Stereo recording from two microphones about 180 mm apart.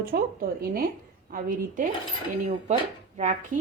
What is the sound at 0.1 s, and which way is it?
Speech, 60° right (ahead or behind).